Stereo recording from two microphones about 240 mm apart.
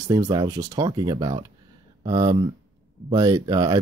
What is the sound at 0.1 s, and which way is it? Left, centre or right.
Speech, centre.